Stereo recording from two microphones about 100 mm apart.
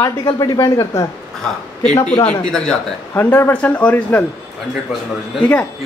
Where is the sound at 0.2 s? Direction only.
40° left (ahead or behind).